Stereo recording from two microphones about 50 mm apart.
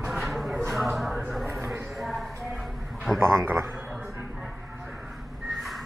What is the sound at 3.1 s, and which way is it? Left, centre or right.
Speech, right.